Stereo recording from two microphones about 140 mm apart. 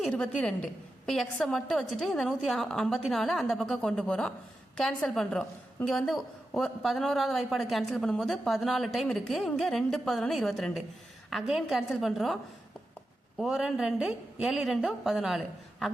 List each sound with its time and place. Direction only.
0.0 s a woman's voice: 5° left (ahead or behind)
13.4 s a woman's voice: 5° right (ahead or behind)